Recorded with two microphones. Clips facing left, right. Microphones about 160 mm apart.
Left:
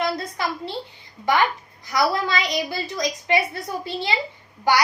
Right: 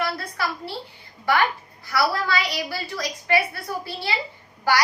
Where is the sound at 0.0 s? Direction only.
20° left (ahead or behind).